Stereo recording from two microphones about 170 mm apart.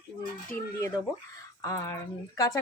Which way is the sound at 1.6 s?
20° left (ahead or behind).